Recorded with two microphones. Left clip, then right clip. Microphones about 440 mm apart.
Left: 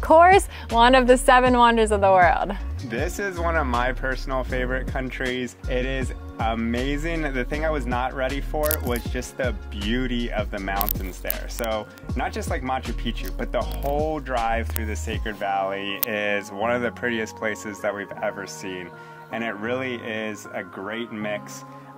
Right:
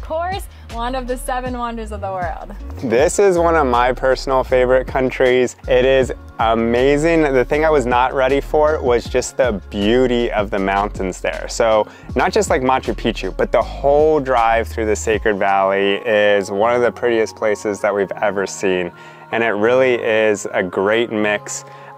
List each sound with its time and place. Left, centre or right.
0.7 s speech: left
2.9 s speech: right